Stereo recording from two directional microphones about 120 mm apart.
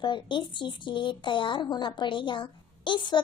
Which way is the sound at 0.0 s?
40° left (ahead or behind).